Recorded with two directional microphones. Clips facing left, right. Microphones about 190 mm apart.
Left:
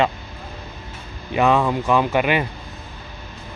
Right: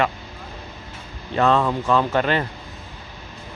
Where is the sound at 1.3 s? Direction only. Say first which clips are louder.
Left 1 dB; 10° left (ahead or behind).